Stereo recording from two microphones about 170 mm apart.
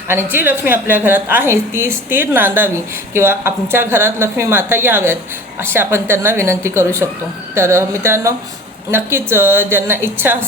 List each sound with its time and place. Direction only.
0.1 s a woman's voice: 15° right (ahead or behind)